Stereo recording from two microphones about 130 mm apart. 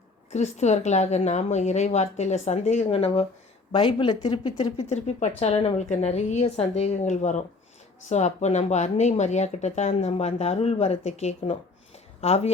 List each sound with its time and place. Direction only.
0.3 s speech: 60° left (ahead or behind)
3.7 s speech: 40° left (ahead or behind)
4.8 s speech: 60° left (ahead or behind)
5.4 s speech: 50° left (ahead or behind)